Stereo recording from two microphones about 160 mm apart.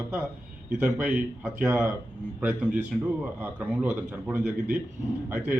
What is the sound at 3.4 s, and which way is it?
Speech, 10° right (ahead or behind).